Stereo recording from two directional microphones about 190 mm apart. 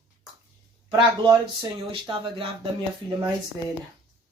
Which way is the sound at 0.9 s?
25° right (ahead or behind).